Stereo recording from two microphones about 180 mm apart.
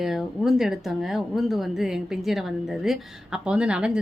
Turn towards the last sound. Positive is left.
turn(degrees=-5)  # may be behind; listen again after turning